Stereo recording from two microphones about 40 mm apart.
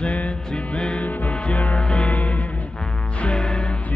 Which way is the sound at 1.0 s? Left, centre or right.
Left.